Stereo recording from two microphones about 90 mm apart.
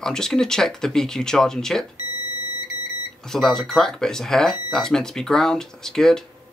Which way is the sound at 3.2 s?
5° left (ahead or behind).